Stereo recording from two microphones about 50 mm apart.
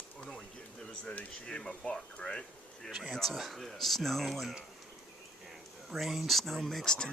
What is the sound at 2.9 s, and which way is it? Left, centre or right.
Speech, centre.